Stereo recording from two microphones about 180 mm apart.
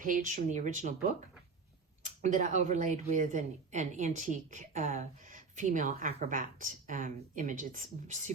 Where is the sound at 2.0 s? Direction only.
45° right (ahead or behind).